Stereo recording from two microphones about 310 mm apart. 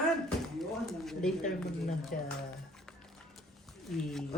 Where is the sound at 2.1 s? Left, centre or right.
Left.